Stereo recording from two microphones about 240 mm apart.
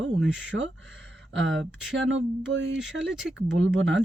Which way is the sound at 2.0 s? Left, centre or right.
Right.